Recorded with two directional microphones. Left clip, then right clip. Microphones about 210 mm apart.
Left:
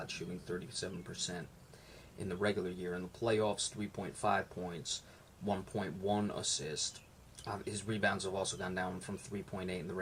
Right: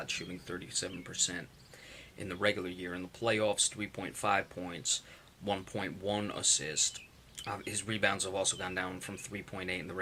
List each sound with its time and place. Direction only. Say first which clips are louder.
0.0 s speech: right 5 dB; 5° right (ahead or behind)